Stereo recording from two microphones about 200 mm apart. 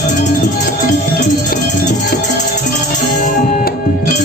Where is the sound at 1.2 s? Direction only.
45° left (ahead or behind).